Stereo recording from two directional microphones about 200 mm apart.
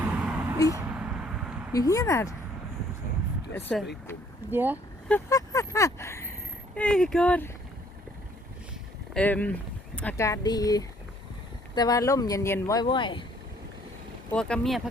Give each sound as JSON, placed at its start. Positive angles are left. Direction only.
{"t": 0.0, "sound": "vehicle", "side_deg": -5}
{"t": 0.7, "sound": "a sound", "side_deg": -5}
{"t": 1.7, "sound": "speech", "side_deg": 15}
{"t": 3.7, "sound": "speech", "side_deg": 0}
{"t": 4.5, "sound": "speech", "side_deg": -10}
{"t": 5.0, "sound": "vehicle", "side_deg": 10}
{"t": 6.7, "sound": "speech", "side_deg": 5}
{"t": 9.1, "sound": "speech", "side_deg": 10}
{"t": 14.3, "sound": "speech", "side_deg": 5}